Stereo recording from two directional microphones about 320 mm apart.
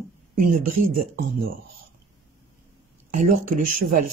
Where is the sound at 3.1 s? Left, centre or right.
Right.